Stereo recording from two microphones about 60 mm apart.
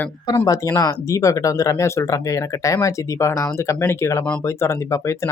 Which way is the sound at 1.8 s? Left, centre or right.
Left.